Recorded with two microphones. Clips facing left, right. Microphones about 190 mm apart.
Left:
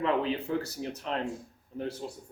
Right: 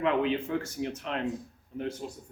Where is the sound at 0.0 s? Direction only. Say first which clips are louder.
Right 2 dB; 35° left (ahead or behind).